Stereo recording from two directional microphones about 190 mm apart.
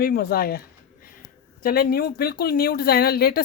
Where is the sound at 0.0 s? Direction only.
50° left (ahead or behind).